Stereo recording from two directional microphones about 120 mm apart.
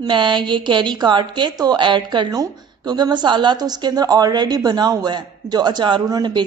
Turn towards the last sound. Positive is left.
turn(degrees=-40)  # may be behind; listen again after turning